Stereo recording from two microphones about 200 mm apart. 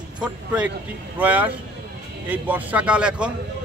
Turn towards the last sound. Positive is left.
turn(degrees=-5)  # may be behind; listen again after turning